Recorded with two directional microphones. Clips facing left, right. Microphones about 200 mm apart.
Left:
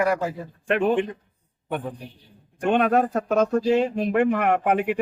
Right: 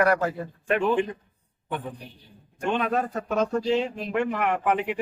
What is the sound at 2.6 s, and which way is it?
A man's voice, 60° left (ahead or behind).